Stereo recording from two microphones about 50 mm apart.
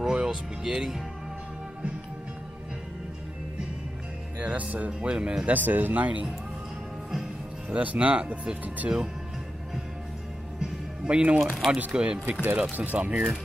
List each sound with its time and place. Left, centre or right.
0.0 s speech: centre
4.4 s speech: right
5.5 s speech: right
7.7 s speech: right
8.2 s speech: centre
8.6 s speech: right
10.6 s music: centre
11.3 s speech: centre
11.9 s speech: right
12.7 s speech: right